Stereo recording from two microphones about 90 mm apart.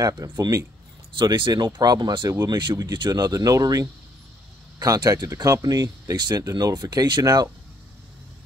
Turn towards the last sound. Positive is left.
turn(degrees=-45)  # may be behind; listen again after turning